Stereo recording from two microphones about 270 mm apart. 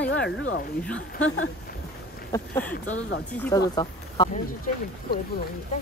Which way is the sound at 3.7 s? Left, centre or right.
Centre.